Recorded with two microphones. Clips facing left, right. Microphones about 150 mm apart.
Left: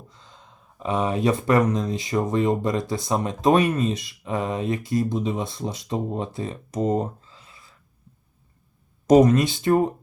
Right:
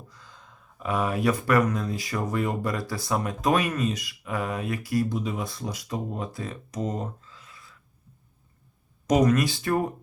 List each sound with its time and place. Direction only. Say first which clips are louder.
0.1 s speech: left 1 dB; 25° left (ahead or behind)
9.0 s speech: left 6 dB; 30° left (ahead or behind)